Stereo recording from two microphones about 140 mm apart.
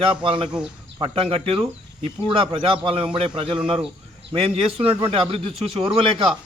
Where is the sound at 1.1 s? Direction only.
45° right (ahead or behind).